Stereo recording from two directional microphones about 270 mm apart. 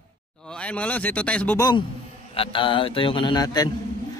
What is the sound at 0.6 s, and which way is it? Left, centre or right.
A man's voice, centre.